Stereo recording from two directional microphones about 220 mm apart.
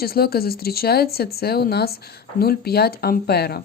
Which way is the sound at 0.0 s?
45° left (ahead or behind).